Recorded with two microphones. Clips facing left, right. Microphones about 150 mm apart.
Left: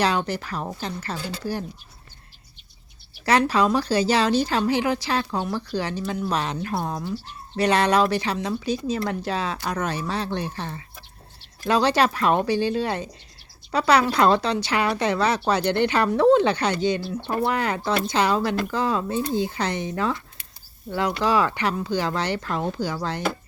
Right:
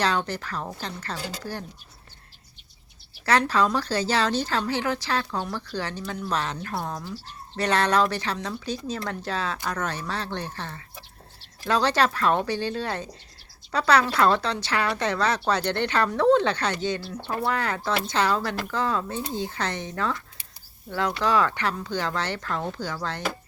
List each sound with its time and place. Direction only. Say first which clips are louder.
0.0 s speech: left 3 dB; 10° left (ahead or behind)
3.2 s speech: left 2 dB; 10° left (ahead or behind)